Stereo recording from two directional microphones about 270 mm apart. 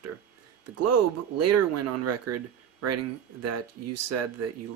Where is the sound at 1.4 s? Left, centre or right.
Right.